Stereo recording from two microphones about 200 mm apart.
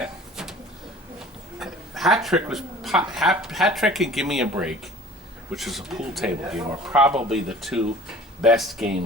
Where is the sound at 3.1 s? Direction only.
Centre (ahead or behind).